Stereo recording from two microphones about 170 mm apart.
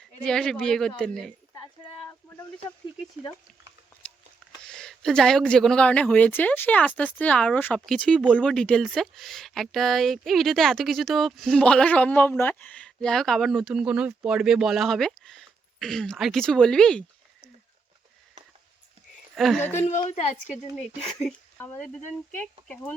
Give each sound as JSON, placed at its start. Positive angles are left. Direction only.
{"t": 0.2, "sound": "speech", "side_deg": 5}
{"t": 4.6, "sound": "speech", "side_deg": 5}
{"t": 19.4, "sound": "speech", "side_deg": 0}
{"t": 19.7, "sound": "a woman's voice", "side_deg": 45}
{"t": 21.6, "sound": "speech", "side_deg": 10}